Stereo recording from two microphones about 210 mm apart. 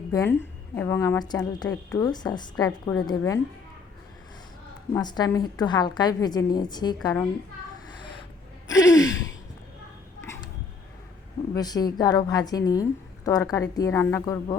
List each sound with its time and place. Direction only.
0.1 s a woman's voice: 10° left (ahead or behind)
4.9 s a woman's voice: 20° left (ahead or behind)
8.6 s gasp: 15° left (ahead or behind)
11.5 s a woman's voice: 20° left (ahead or behind)